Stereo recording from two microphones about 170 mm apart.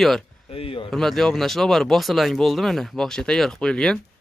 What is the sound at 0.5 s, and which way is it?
Speech, 30° left (ahead or behind).